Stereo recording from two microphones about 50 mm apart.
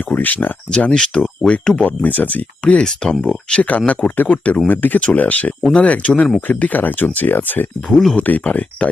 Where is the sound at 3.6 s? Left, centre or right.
Left.